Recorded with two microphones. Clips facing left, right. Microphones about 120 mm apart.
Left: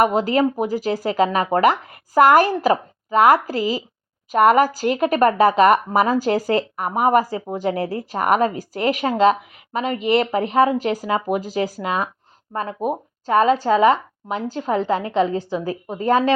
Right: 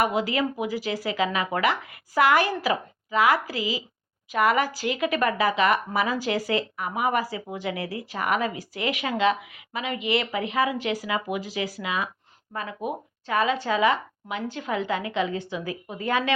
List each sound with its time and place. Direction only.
0.0 s speech: 45° left (ahead or behind)